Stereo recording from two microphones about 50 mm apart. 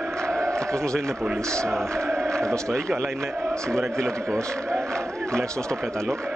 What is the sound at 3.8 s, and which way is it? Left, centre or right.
Speech, right.